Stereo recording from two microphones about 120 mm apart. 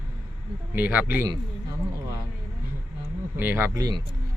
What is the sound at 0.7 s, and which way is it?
Speech, 15° right (ahead or behind).